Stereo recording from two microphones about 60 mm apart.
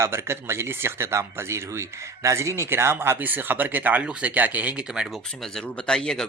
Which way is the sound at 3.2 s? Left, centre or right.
Right.